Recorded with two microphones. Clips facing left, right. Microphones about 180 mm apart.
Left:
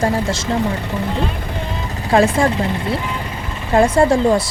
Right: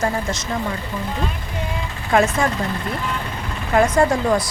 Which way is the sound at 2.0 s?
35° left (ahead or behind).